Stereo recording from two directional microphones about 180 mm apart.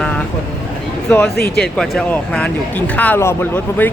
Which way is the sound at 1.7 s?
Centre (ahead or behind).